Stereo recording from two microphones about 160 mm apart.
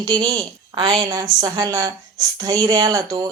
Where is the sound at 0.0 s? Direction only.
25° right (ahead or behind).